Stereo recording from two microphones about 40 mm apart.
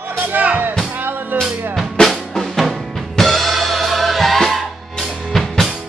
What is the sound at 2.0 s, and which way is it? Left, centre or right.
Drum, left.